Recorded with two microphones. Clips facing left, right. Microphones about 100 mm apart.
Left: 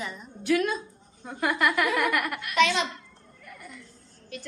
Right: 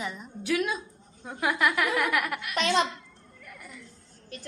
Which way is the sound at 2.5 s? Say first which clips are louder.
Left 2 dB; 40° right (ahead or behind).